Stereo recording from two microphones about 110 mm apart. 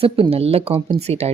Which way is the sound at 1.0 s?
75° right (ahead or behind).